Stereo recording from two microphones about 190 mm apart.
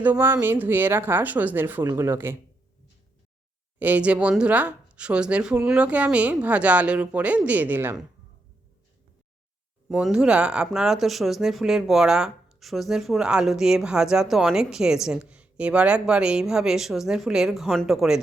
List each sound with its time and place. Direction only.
0.0 s speech: 10° right (ahead or behind)
3.8 s speech: 10° right (ahead or behind)
9.9 s speech: 5° right (ahead or behind)